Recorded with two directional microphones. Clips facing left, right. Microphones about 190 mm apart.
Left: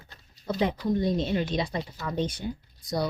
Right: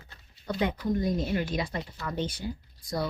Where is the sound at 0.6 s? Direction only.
25° left (ahead or behind).